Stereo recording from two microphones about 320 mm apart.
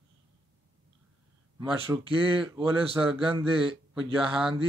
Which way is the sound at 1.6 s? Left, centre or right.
Centre.